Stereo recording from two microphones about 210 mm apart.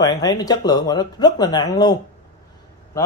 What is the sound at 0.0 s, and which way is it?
Speech, 20° left (ahead or behind).